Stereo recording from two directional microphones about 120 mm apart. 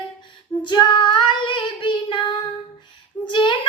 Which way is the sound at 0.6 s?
40° left (ahead or behind).